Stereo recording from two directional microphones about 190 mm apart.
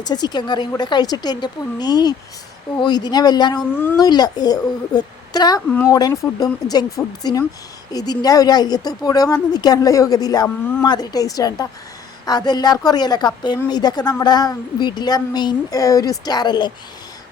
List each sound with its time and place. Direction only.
0.0 s a woman's voice: 20° left (ahead or behind)
3.6 s a woman's voice: 10° left (ahead or behind)